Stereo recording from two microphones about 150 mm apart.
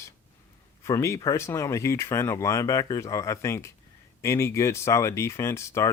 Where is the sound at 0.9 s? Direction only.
20° left (ahead or behind).